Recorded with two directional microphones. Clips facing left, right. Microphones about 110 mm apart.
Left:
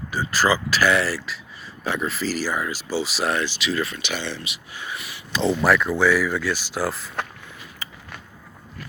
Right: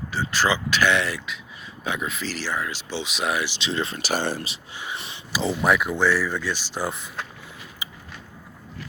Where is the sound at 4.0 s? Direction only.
45° right (ahead or behind).